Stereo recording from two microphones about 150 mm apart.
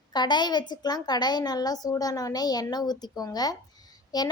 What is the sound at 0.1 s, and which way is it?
A child's voice, 30° left (ahead or behind).